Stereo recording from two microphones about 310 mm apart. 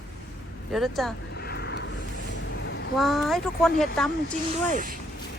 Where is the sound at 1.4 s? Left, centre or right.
Left.